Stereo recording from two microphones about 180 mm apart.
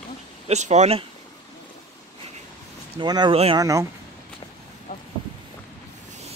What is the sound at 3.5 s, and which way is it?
Speech, 20° right (ahead or behind).